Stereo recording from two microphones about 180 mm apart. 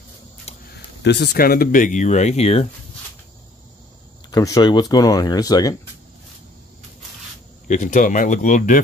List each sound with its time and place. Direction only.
0.5 s a sound: 35° left (ahead or behind)
1.0 s speech: 70° left (ahead or behind); by 2.7 s 35° left (ahead or behind)
4.3 s speech: 20° left (ahead or behind)
7.6 s speech: 45° left (ahead or behind)